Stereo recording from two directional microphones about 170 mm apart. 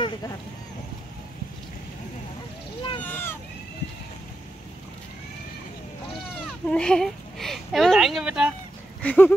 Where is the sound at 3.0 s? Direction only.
10° left (ahead or behind).